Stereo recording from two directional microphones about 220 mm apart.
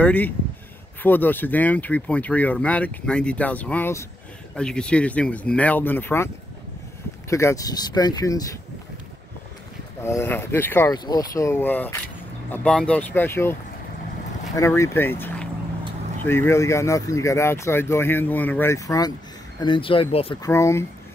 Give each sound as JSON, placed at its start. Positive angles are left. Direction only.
{"t": 0.0, "sound": "speech", "side_deg": 5}
{"t": 10.0, "sound": "speech", "side_deg": 10}
{"t": 20.4, "sound": "speech", "side_deg": 15}